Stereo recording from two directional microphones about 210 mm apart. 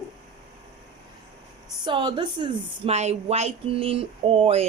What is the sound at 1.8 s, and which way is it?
A woman's voice, 20° right (ahead or behind).